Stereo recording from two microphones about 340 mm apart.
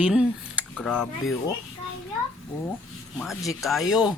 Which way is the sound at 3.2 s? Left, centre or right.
Centre.